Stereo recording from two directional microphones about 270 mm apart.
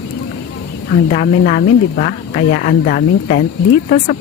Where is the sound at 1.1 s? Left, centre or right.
Left.